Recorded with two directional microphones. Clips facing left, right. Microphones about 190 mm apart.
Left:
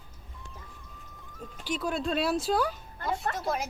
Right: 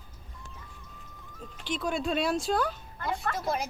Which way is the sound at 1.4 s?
5° left (ahead or behind).